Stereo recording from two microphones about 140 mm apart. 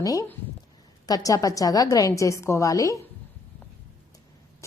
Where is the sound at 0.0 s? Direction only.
25° left (ahead or behind).